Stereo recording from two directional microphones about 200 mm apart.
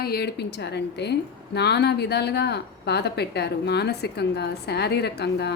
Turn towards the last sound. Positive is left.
turn(degrees=55)  # may be behind; listen again after turning